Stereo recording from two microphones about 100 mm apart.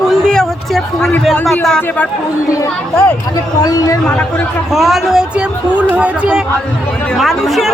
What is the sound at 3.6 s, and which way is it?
Speech, 35° left (ahead or behind).